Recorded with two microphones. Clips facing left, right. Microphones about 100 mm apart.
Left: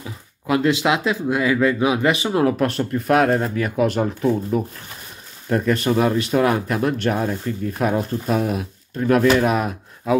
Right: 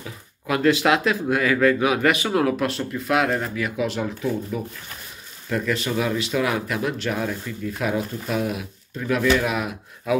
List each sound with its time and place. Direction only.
0.0 s speech: 25° left (ahead or behind)
2.6 s speech: 45° left (ahead or behind)